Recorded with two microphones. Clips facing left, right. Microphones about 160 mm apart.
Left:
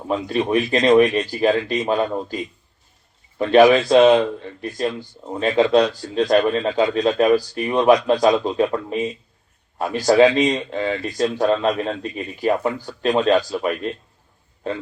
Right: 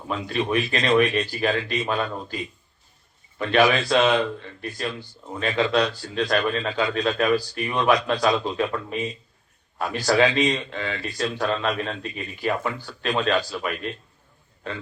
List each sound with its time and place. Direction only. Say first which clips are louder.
0.1 s speech: left 5 dB; 35° left (ahead or behind)